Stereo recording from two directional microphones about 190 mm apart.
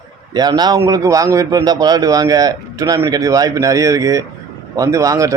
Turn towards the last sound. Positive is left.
turn(degrees=-15)  # may be behind; listen again after turning